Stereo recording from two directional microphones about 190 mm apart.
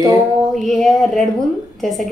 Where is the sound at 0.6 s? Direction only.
Centre (ahead or behind).